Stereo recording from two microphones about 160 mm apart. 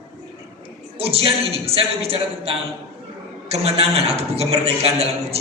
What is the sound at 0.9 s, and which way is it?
A man's voice, 35° right (ahead or behind).